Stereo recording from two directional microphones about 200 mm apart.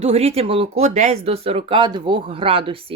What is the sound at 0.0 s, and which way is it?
Speech, 30° right (ahead or behind).